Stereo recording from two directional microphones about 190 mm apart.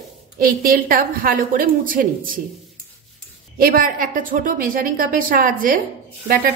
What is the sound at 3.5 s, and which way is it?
A woman's voice, 50° right (ahead or behind).